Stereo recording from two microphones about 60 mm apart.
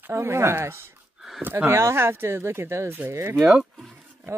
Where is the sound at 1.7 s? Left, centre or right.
Right.